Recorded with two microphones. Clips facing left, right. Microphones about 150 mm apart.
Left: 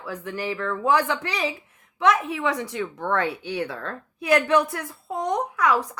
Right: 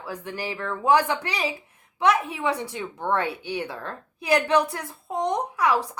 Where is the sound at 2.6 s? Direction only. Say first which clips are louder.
Left 2 dB; 15° right (ahead or behind).